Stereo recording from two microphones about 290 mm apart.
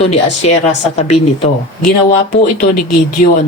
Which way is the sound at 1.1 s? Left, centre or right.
Left.